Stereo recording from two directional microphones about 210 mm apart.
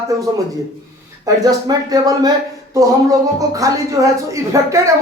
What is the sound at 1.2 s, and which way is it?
Speech, 15° right (ahead or behind).